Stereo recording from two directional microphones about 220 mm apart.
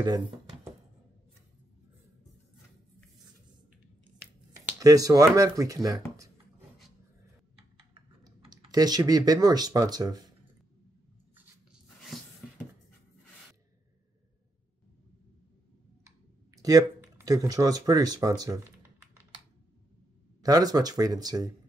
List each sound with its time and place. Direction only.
0.0 s speech: 20° right (ahead or behind)
4.6 s speech: 15° right (ahead or behind)
8.2 s speech: 15° right (ahead or behind)
16.5 s speech: 15° right (ahead or behind)
20.4 s speech: 15° right (ahead or behind)